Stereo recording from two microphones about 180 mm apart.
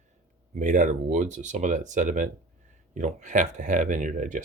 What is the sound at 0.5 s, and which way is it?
Speech, 45° right (ahead or behind).